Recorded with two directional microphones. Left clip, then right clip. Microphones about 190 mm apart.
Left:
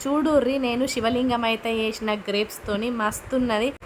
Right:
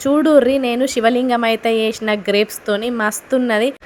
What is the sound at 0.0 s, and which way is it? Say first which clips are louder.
A woman's voice: right 9 dB; 20° right (ahead or behind).